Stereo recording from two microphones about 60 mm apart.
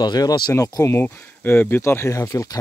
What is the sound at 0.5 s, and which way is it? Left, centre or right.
Speech, left.